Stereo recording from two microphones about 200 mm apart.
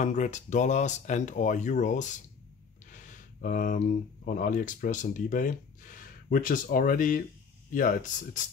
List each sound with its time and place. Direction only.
0.0 s speech: 35° left (ahead or behind)